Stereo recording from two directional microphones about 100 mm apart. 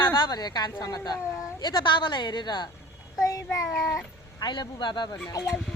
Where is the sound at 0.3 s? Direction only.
45° left (ahead or behind).